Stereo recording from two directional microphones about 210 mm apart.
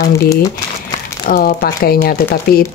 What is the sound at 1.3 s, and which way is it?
Speech, 45° left (ahead or behind).